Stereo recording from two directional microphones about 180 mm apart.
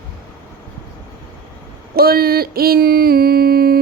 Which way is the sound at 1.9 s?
55° right (ahead or behind).